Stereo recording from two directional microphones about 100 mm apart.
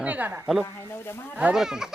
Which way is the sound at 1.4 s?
10° right (ahead or behind).